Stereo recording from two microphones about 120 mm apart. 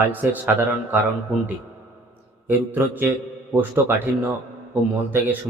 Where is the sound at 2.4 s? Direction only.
15° right (ahead or behind).